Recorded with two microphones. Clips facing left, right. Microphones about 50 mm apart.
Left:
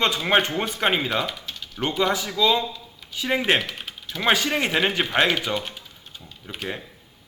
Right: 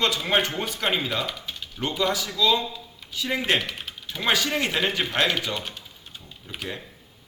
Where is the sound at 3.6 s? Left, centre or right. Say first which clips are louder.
Left 1 dB; centre.